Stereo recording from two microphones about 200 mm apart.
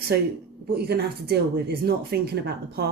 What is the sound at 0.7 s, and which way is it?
Speech, 55° right (ahead or behind).